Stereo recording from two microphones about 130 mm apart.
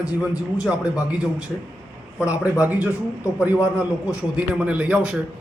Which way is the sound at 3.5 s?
20° left (ahead or behind).